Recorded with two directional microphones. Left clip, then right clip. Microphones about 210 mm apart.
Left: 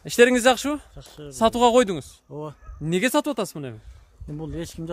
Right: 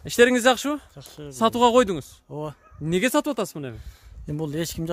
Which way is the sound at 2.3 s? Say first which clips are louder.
Right 2 dB; 30° right (ahead or behind).